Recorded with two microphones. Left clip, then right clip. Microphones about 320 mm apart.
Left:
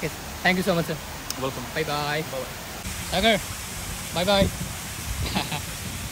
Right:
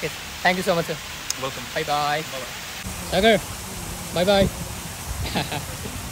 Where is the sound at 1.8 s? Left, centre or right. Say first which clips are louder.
Right 4 dB; centre.